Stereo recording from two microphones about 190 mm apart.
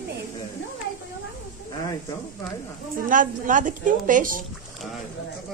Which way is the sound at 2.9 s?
45° right (ahead or behind).